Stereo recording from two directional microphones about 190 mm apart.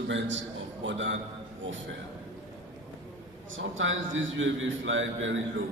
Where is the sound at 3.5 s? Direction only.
90° right.